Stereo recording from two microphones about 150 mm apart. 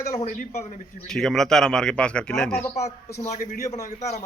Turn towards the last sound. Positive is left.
turn(degrees=50)  # may be behind; listen again after turning